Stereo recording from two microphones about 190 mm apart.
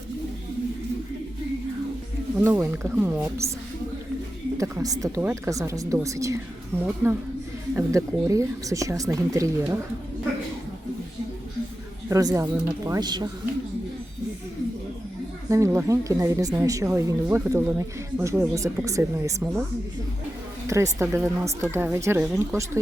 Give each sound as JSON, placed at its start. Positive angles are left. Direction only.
{"t": 2.4, "sound": "speech", "side_deg": -10}
{"t": 4.5, "sound": "speech", "side_deg": -15}
{"t": 12.0, "sound": "speech", "side_deg": -15}
{"t": 15.4, "sound": "speech", "side_deg": -15}
{"t": 20.7, "sound": "speech", "side_deg": -15}